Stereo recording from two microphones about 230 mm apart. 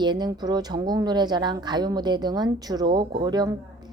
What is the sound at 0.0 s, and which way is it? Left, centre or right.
Speech, centre.